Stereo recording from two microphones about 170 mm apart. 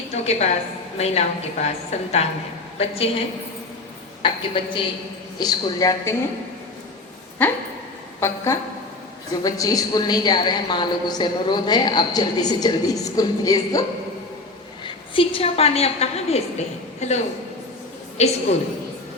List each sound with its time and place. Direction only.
0.1 s a woman's voice: 40° left (ahead or behind)
4.2 s a woman's voice: 30° left (ahead or behind)
7.4 s a woman's voice: 10° left (ahead or behind)
14.8 s a woman's voice: 30° left (ahead or behind)